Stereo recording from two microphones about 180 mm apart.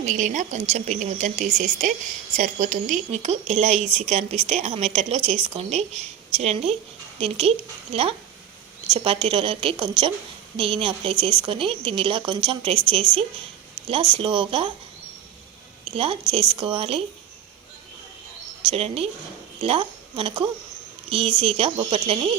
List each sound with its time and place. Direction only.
0.0 s speech: 45° right (ahead or behind)
8.9 s speech: 30° right (ahead or behind)
16.0 s speech: 30° right (ahead or behind)
18.6 s a woman's voice: 30° right (ahead or behind)